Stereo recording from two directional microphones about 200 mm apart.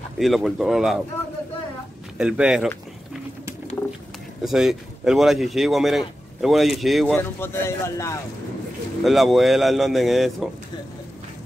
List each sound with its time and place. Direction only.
0.2 s speech: centre (ahead or behind)
2.1 s speech: 5° right (ahead or behind)
4.4 s speech: centre (ahead or behind)
7.2 s speech: 10° left (ahead or behind)
9.0 s speech: centre (ahead or behind)